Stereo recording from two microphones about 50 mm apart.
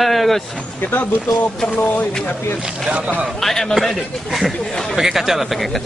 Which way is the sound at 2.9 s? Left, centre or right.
Right.